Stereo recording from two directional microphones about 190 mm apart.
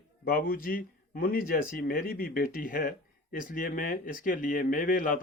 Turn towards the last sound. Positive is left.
turn(degrees=45)  # may be behind; listen again after turning